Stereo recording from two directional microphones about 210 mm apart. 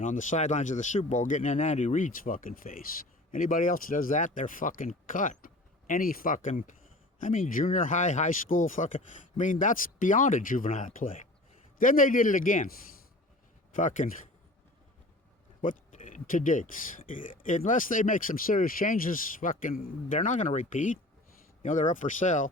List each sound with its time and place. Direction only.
0.0 s speech: 35° left (ahead or behind)
13.7 s speech: 35° left (ahead or behind)
15.6 s speech: 40° left (ahead or behind)